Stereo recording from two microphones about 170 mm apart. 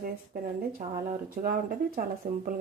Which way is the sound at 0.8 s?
55° right (ahead or behind).